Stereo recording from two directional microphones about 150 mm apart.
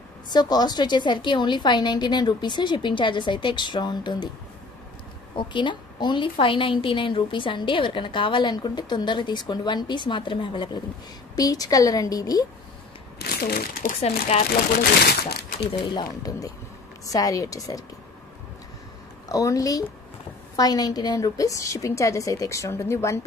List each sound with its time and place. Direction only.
0.3 s a woman's voice: 30° left (ahead or behind)
5.3 s a woman's voice: 30° left (ahead or behind)
13.2 s speech: 90° left
15.9 s a woman's voice: 25° left (ahead or behind)
19.2 s a woman's voice: 25° left (ahead or behind)